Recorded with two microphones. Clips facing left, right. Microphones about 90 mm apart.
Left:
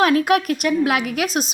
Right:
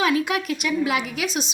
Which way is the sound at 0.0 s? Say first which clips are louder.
Left 6 dB; 55° left (ahead or behind).